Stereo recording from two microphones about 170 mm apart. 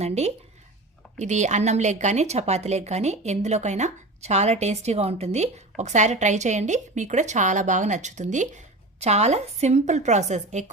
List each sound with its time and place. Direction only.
0.0 s a woman's voice: 40° right (ahead or behind)